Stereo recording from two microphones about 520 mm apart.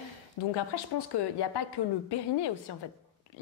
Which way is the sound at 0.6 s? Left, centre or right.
Left.